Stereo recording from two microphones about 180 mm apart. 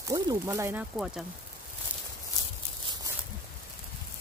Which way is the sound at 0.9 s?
5° right (ahead or behind).